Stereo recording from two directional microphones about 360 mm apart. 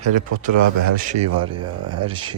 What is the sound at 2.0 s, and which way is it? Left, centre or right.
Speech, centre.